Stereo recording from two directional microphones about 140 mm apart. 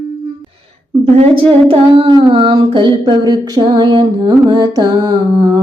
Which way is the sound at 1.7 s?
35° right (ahead or behind).